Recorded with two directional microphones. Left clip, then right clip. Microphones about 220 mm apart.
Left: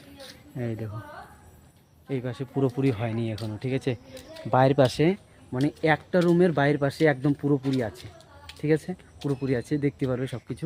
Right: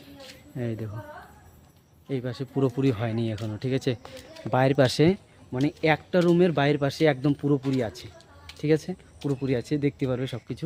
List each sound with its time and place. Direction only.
0.5 s speech: 5° right (ahead or behind)
2.0 s speech: 5° right (ahead or behind)
4.5 s speech: 5° left (ahead or behind)
4.8 s speech: 20° right (ahead or behind)
5.5 s speech: centre (ahead or behind)